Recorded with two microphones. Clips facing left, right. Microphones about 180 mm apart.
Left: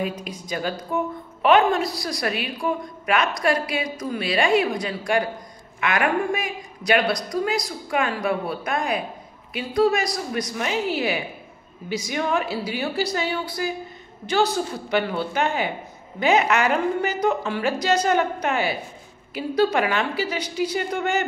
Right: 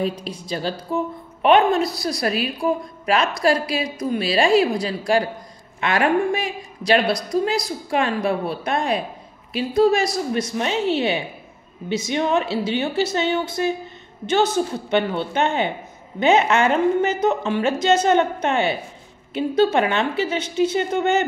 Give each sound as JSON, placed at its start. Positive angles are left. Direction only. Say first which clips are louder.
{"t": 0.0, "sound": "a woman's voice", "louder": "right 3 dB", "side_deg": -30}